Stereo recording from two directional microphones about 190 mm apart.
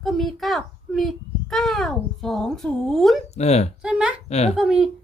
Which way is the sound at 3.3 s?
35° left (ahead or behind).